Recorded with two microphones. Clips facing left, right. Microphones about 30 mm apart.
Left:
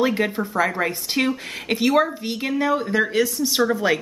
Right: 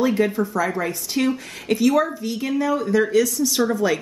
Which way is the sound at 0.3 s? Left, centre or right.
Left.